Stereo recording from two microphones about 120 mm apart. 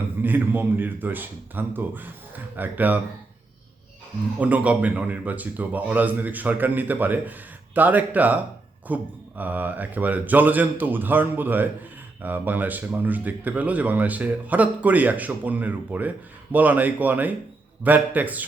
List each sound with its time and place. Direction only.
0.2 s speech: 15° right (ahead or behind)
4.4 s speech: 10° right (ahead or behind)